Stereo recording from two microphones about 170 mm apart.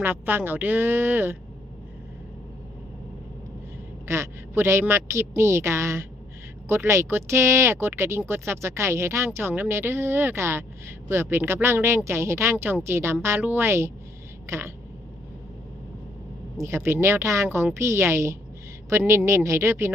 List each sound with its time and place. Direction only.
0.0 s speech: 10° right (ahead or behind)
4.1 s speech: 15° right (ahead or behind)
16.6 s speech: 15° right (ahead or behind)